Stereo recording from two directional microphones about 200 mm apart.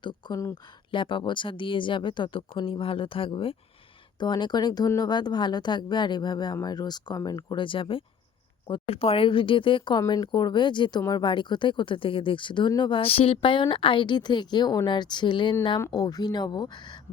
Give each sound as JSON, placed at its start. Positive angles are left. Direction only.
{"t": 0.0, "sound": "speech", "side_deg": 20}